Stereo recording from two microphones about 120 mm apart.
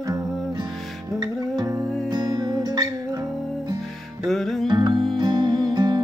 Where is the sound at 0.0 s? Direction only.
30° right (ahead or behind).